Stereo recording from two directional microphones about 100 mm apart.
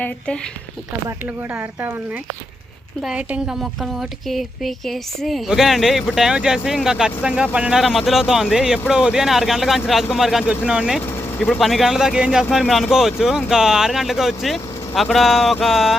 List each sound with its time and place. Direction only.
1.2 s speech: 20° right (ahead or behind)
3.0 s speech: 10° right (ahead or behind)